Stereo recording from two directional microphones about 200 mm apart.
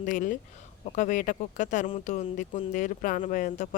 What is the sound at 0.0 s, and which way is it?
Speech, 40° left (ahead or behind).